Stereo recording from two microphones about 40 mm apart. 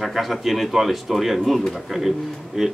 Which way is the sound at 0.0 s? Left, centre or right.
Centre.